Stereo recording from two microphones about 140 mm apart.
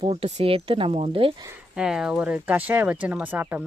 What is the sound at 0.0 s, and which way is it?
Speech, 50° right (ahead or behind).